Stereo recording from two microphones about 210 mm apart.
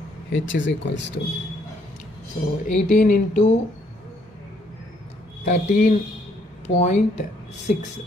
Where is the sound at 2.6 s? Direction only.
35° left (ahead or behind).